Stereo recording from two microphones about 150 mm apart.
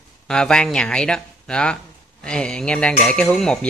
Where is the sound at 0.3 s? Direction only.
5° left (ahead or behind).